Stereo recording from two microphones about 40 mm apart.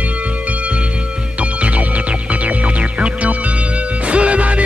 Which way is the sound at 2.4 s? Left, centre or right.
Right.